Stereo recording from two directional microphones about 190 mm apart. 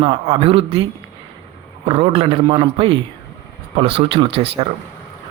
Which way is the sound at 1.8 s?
30° right (ahead or behind).